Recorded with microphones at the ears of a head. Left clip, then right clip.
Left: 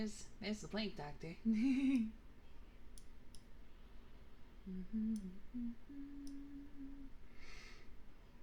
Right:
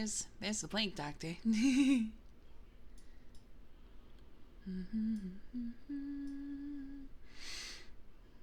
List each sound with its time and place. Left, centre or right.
0.1 s a woman's voice: right
4.6 s humming: right